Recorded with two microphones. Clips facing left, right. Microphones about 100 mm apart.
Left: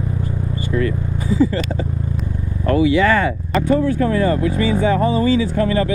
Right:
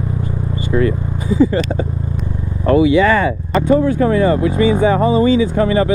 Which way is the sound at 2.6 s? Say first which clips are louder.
Right 3 dB; 20° right (ahead or behind).